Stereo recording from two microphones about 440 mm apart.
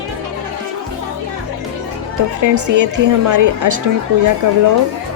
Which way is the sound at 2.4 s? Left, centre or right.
Right.